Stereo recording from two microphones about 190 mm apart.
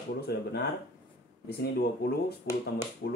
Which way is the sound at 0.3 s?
60° left (ahead or behind).